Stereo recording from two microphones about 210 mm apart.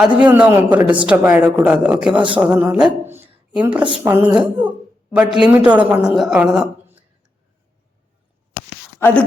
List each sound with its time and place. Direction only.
0.2 s speech: 5° right (ahead or behind)
3.8 s a woman's voice: 20° right (ahead or behind)
4.1 s a woman's voice: 5° right (ahead or behind)
9.0 s speech: 10° left (ahead or behind)